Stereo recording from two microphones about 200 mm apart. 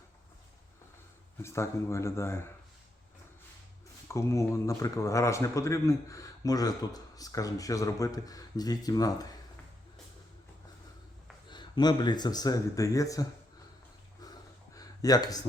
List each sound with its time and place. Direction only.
1.4 s a man's voice: 15° left (ahead or behind)
4.1 s a man's voice: 15° left (ahead or behind)
11.4 s speech: 20° left (ahead or behind)
14.8 s a sound: 20° left (ahead or behind)